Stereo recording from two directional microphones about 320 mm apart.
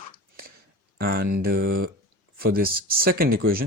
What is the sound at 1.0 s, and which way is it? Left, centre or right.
Speech, right.